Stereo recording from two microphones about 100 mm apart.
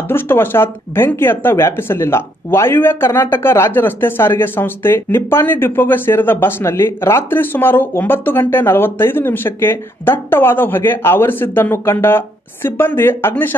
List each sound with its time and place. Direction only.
0.1 s speech: 20° left (ahead or behind)